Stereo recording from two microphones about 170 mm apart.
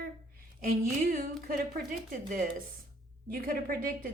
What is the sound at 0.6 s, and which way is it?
Speech, 55° right (ahead or behind).